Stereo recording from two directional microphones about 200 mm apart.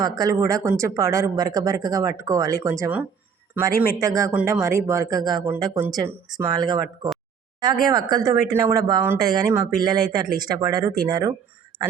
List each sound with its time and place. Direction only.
0.0 s speech: 15° right (ahead or behind)
3.7 s speech: 50° left (ahead or behind)
4.0 s speech: 15° right (ahead or behind)
4.3 s speech: 5° right (ahead or behind)